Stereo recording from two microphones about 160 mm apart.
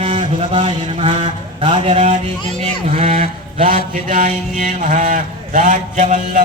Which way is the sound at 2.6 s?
40° right (ahead or behind).